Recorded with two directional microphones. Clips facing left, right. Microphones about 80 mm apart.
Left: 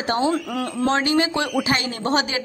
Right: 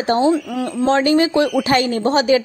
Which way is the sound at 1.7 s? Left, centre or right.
Right.